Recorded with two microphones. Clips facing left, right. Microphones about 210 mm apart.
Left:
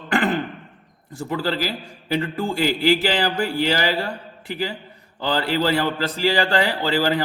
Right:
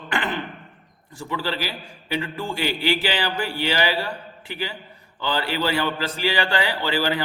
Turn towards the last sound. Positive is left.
turn(degrees=40)  # may be behind; listen again after turning